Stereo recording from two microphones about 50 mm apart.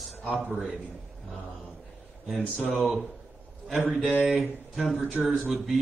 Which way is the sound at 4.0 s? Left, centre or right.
Left.